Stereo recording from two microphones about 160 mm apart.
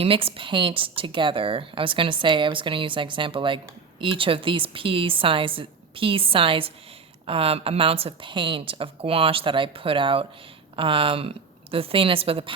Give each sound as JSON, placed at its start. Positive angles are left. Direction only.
{"t": 0.0, "sound": "speech", "side_deg": -35}